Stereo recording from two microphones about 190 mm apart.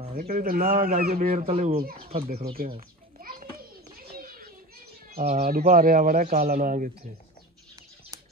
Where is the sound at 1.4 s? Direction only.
35° right (ahead or behind).